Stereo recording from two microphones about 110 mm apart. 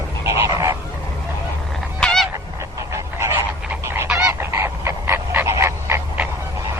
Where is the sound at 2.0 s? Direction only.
10° left (ahead or behind).